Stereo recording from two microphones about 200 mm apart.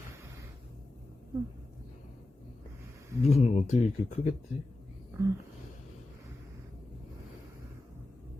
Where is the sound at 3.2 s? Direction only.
35° left (ahead or behind).